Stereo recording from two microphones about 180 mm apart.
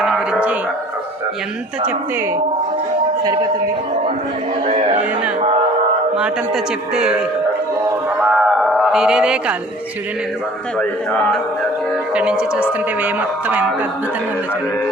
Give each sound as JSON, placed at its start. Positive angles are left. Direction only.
{"t": 0.0, "sound": "a sound", "side_deg": -5}
{"t": 4.6, "sound": "speech", "side_deg": -35}
{"t": 6.1, "sound": "a man's voice", "side_deg": -5}
{"t": 10.8, "sound": "a man's voice", "side_deg": 5}
{"t": 12.1, "sound": "a man's voice", "side_deg": -5}